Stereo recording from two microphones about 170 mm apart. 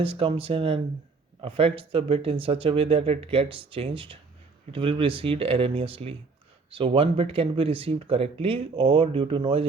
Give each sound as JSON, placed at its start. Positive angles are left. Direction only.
{"t": 0.0, "sound": "speech", "side_deg": -35}